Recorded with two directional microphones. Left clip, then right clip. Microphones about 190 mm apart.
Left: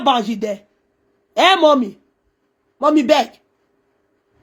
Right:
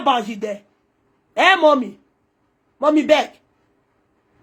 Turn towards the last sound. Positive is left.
turn(degrees=40)  # may be behind; listen again after turning